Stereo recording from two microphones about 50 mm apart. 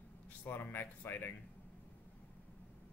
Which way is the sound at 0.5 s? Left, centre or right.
Left.